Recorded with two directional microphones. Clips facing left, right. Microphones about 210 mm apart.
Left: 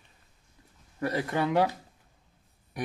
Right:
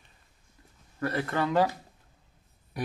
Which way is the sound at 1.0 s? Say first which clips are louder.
Left 1 dB; 15° left (ahead or behind).